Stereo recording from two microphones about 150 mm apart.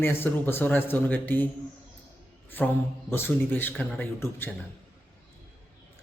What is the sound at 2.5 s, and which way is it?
A man's voice, 10° left (ahead or behind).